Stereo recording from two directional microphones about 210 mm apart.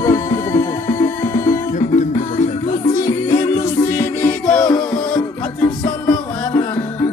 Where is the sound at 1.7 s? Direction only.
35° left (ahead or behind).